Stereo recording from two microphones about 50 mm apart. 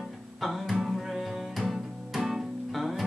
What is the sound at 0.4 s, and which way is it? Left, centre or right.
Music, centre.